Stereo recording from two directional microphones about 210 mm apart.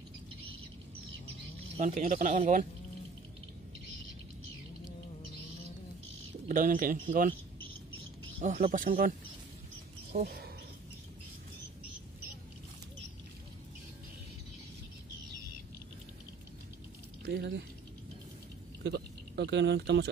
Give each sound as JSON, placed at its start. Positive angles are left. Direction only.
{"t": 1.8, "sound": "speech", "side_deg": -35}
{"t": 6.4, "sound": "speech", "side_deg": -40}
{"t": 8.4, "sound": "speech", "side_deg": -40}
{"t": 10.1, "sound": "speech", "side_deg": -45}
{"t": 17.2, "sound": "speech", "side_deg": -50}
{"t": 18.8, "sound": "speech", "side_deg": -55}